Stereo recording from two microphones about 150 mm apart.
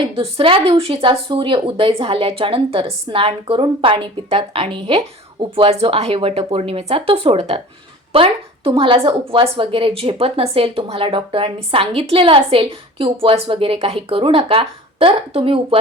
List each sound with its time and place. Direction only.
0.2 s a woman's voice: 40° right (ahead or behind)